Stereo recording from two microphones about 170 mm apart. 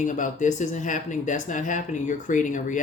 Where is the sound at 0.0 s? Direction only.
50° left (ahead or behind).